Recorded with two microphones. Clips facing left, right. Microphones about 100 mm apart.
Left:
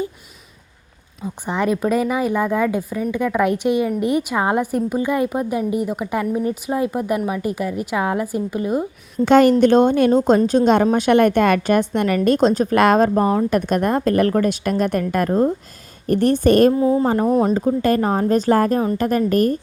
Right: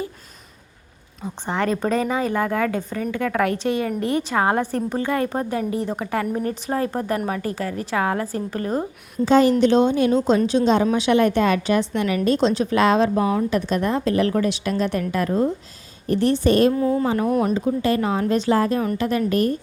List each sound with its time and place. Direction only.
1.5 s a woman's voice: 10° left (ahead or behind)
9.2 s a woman's voice: 60° left (ahead or behind)
16.7 s speech: 25° left (ahead or behind)
17.1 s speech: 35° left (ahead or behind)
17.8 s a woman's voice: 45° left (ahead or behind)